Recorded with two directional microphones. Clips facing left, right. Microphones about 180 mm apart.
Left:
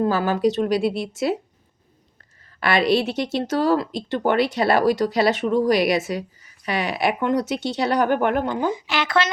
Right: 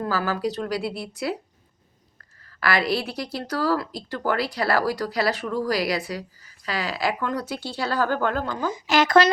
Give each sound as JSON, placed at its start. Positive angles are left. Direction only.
{"t": 0.0, "sound": "speech", "side_deg": 25}
{"t": 2.6, "sound": "speech", "side_deg": 25}
{"t": 8.7, "sound": "speech", "side_deg": -40}